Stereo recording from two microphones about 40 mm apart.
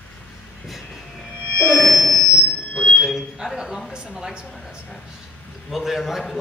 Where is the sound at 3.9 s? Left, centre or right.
Centre.